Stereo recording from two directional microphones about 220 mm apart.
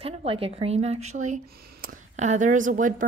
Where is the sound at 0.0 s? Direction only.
25° right (ahead or behind).